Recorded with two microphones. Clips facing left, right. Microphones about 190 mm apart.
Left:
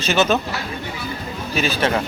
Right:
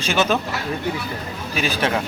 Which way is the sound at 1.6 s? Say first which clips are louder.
Left 2 dB; 10° right (ahead or behind).